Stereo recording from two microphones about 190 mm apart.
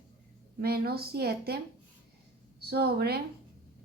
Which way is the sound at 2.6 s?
60° right (ahead or behind).